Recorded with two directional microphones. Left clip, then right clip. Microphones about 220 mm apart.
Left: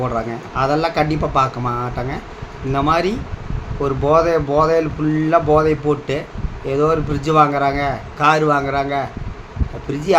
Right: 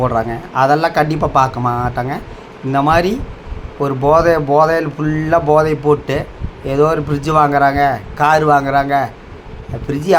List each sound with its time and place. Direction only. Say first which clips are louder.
0.0 s a man's voice: right 5 dB; 20° right (ahead or behind)